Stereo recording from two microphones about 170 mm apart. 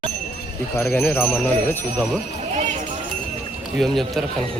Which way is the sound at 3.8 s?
Centre (ahead or behind).